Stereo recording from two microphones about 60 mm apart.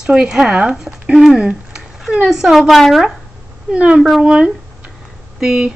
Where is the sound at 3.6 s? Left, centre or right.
Centre.